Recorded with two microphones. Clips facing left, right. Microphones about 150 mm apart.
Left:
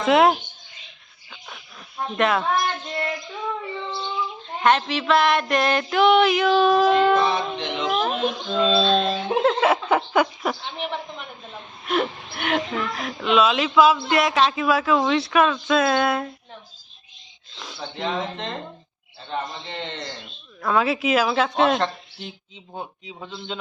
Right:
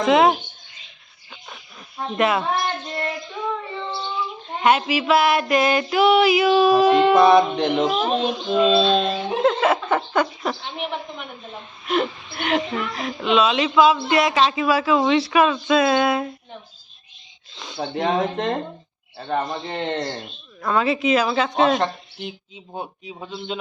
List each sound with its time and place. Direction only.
0.0 s speech: centre (ahead or behind)
1.3 s a sound: 10° right (ahead or behind)
2.1 s speech: 5° right (ahead or behind)
4.6 s speech: 10° right (ahead or behind)
7.2 s a man's voice: 60° right (ahead or behind)
7.9 s speech: 10° right (ahead or behind)
8.1 s speech: 20° right (ahead or behind)
9.4 s a sound: 5° left (ahead or behind)
9.9 s speech: 5° left (ahead or behind)
11.9 s speech: centre (ahead or behind)
17.7 s a man's voice: 55° right (ahead or behind)
20.6 s speech: centre (ahead or behind)
21.8 s speech: 15° right (ahead or behind)